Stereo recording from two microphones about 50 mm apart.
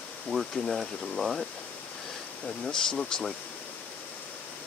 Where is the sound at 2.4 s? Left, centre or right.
Centre.